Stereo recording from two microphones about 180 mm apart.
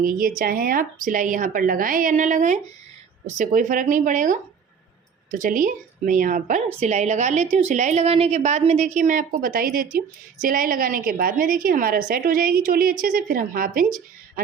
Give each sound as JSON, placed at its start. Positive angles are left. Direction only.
{"t": 0.0, "sound": "a woman's voice", "side_deg": -50}